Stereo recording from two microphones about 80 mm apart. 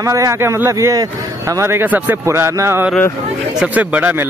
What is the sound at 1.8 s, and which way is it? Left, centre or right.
Speech, right.